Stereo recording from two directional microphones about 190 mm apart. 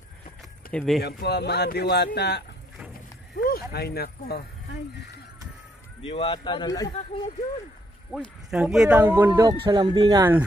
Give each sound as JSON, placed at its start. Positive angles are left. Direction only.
{"t": 0.4, "sound": "a sound", "side_deg": 5}
{"t": 1.0, "sound": "speech", "side_deg": 60}
{"t": 3.3, "sound": "a sound", "side_deg": 55}
{"t": 3.7, "sound": "speech", "side_deg": 55}
{"t": 6.0, "sound": "speech", "side_deg": 25}
{"t": 8.1, "sound": "speech", "side_deg": 0}